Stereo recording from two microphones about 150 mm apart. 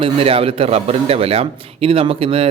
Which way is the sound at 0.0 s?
40° right (ahead or behind).